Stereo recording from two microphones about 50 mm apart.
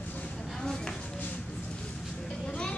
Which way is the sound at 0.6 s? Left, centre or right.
Centre.